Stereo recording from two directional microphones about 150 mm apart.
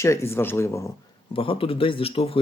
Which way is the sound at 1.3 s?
35° left (ahead or behind).